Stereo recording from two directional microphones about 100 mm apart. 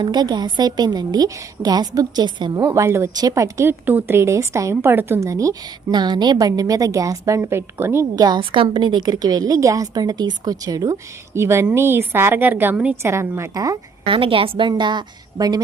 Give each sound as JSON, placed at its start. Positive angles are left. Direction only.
{"t": 0.0, "sound": "a woman's voice", "side_deg": -45}
{"t": 3.7, "sound": "a woman's voice", "side_deg": -20}
{"t": 5.9, "sound": "a woman's voice", "side_deg": -45}
{"t": 8.1, "sound": "a woman's voice", "side_deg": -40}
{"t": 8.4, "sound": "a woman's voice", "side_deg": -55}
{"t": 13.0, "sound": "a woman's voice", "side_deg": -25}
{"t": 14.0, "sound": "a woman's voice", "side_deg": -60}
{"t": 14.7, "sound": "a woman's voice", "side_deg": -50}